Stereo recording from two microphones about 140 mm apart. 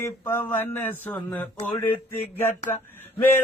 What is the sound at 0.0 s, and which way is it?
Speech, 15° left (ahead or behind).